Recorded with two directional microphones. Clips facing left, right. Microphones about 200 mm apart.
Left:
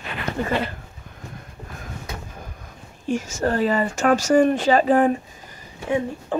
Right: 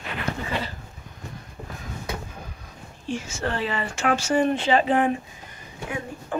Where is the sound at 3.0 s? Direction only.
45° left (ahead or behind).